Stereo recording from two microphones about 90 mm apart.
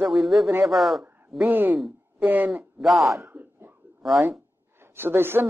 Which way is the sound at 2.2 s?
20° right (ahead or behind).